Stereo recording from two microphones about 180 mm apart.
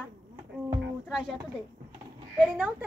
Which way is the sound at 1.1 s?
Centre (ahead or behind).